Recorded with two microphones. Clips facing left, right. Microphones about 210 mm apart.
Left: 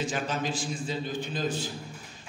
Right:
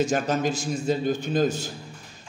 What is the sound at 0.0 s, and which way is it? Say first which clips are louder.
A man's voice: right 7 dB; 45° right (ahead or behind).